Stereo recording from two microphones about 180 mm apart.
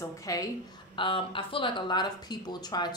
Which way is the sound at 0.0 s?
20° left (ahead or behind).